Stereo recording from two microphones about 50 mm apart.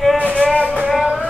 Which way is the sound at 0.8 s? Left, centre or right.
Centre.